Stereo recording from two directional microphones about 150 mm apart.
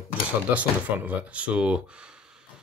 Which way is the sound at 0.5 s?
10° right (ahead or behind).